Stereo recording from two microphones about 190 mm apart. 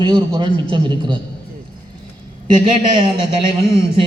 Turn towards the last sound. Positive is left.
turn(degrees=-25)  # may be behind; listen again after turning